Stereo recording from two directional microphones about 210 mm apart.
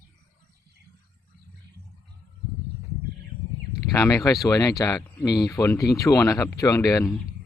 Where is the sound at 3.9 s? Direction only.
15° left (ahead or behind).